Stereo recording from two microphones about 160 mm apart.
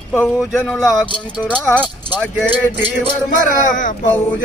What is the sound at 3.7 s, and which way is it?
Speech, 55° left (ahead or behind).